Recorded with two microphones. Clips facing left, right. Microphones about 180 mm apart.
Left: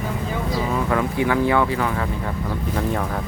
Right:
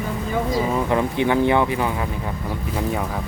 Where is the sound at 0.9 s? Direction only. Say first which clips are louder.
Right 1 dB; 25° right (ahead or behind).